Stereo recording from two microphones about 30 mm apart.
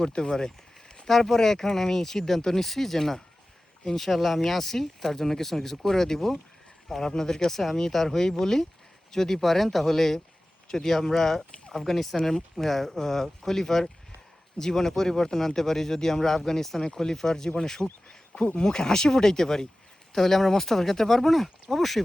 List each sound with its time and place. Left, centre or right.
0.0 s speech: left
1.0 s speech: centre